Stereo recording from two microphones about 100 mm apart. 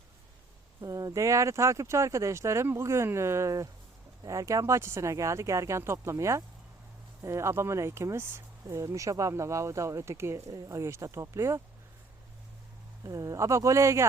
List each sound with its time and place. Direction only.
0.8 s speech: 35° right (ahead or behind)
13.0 s speech: 35° right (ahead or behind)